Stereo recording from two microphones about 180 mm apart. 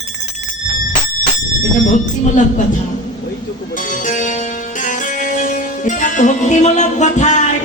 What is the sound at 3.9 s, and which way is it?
Music, 45° left (ahead or behind).